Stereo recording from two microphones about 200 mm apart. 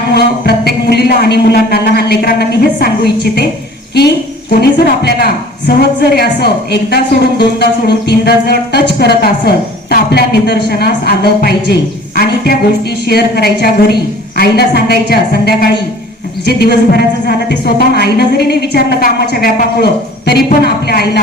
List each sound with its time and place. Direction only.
0.1 s a woman's voice: 55° left (ahead or behind)
4.6 s a woman's voice: 50° left (ahead or behind)